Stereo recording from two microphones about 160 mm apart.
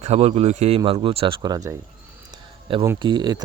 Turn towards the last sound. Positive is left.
turn(degrees=-25)  # may be behind; listen again after turning